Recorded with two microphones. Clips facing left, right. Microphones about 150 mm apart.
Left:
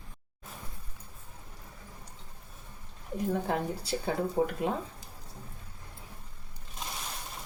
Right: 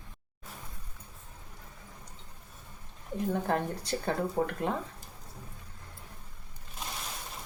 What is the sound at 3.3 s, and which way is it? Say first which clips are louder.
Speech: even; 5° left (ahead or behind).